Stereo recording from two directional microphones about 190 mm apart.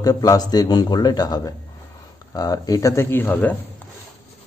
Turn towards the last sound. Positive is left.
turn(degrees=10)  # may be behind; listen again after turning